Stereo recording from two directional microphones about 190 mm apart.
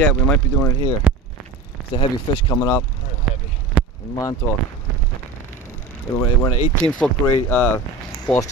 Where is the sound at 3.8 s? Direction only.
5° right (ahead or behind).